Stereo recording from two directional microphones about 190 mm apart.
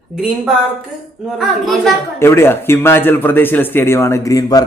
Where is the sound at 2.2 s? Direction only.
10° left (ahead or behind).